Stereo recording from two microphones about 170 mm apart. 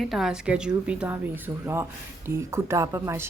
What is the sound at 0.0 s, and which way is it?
A woman's voice, centre (ahead or behind).